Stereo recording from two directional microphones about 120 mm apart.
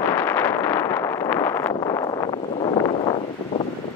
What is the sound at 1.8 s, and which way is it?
Wind noise, 35° left (ahead or behind).